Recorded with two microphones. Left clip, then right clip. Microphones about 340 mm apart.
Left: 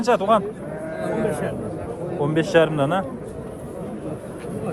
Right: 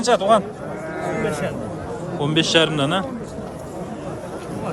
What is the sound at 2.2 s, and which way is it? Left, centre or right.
Speech, centre.